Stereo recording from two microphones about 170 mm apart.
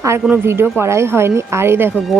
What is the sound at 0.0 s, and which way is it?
Speech, 15° right (ahead or behind).